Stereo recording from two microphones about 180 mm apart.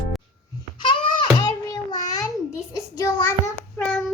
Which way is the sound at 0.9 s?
25° left (ahead or behind).